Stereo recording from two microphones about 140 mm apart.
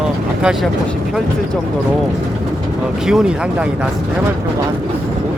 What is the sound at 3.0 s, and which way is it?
Speech, 5° right (ahead or behind).